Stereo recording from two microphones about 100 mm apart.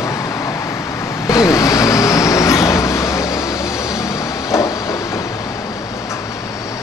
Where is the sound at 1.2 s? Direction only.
35° left (ahead or behind).